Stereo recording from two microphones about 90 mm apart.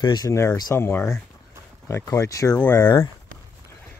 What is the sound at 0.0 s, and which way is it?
Speech, 50° left (ahead or behind).